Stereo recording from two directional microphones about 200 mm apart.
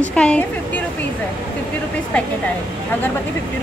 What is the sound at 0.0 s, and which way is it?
Speech, 5° left (ahead or behind).